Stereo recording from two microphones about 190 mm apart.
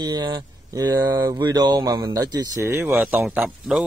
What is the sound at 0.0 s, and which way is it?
Speech, 25° right (ahead or behind).